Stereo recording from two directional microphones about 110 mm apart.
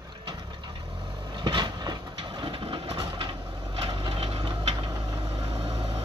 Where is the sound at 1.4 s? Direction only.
45° right (ahead or behind).